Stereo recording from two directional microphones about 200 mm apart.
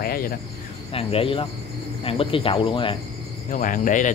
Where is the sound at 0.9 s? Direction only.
30° left (ahead or behind).